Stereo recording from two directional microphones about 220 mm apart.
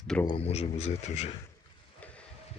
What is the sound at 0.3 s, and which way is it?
Speech, 25° left (ahead or behind).